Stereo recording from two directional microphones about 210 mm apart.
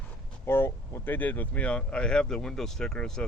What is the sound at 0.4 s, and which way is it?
Speech, 10° left (ahead or behind).